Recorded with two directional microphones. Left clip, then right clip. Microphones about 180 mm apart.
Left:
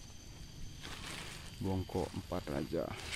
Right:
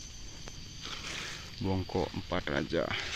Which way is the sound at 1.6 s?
10° right (ahead or behind).